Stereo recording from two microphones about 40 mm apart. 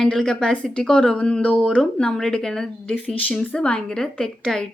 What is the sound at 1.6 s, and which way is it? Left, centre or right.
A woman's voice, centre.